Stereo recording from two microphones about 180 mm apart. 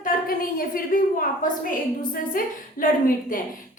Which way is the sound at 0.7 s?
50° left (ahead or behind).